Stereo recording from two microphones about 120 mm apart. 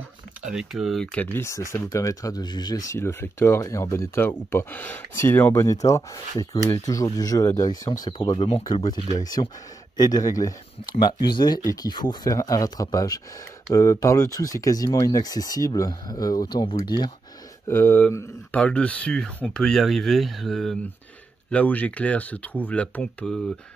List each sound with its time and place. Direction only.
0.5 s speech: 5° right (ahead or behind)
1.1 s speech: 15° left (ahead or behind); by 2.8 s 35° left (ahead or behind)
2.9 s speech: 25° left (ahead or behind)
17.6 s speech: 20° left (ahead or behind)